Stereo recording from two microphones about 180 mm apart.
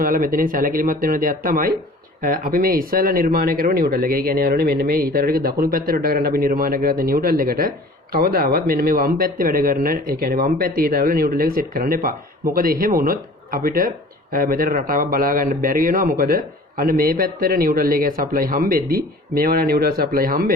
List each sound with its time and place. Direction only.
0.0 s speech: 50° right (ahead or behind)